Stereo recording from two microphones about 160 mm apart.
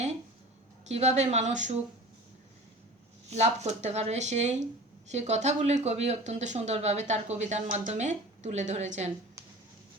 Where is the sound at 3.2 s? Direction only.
45° right (ahead or behind).